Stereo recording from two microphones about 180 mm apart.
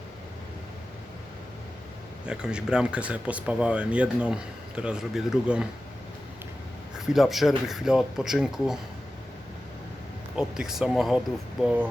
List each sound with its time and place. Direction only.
2.2 s speech: 5° right (ahead or behind)
7.0 s speech: centre (ahead or behind)
10.3 s speech: 5° right (ahead or behind)